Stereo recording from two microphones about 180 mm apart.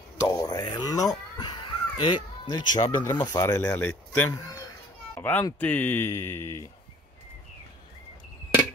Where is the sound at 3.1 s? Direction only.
20° left (ahead or behind).